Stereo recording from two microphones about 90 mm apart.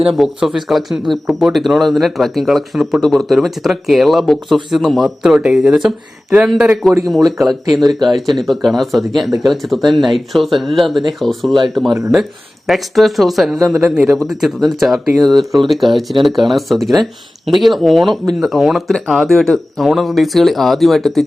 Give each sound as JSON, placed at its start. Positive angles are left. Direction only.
{"t": 0.0, "sound": "speech", "side_deg": 0}